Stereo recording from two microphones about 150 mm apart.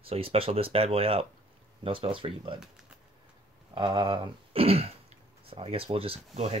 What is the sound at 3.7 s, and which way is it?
Speech, 30° right (ahead or behind).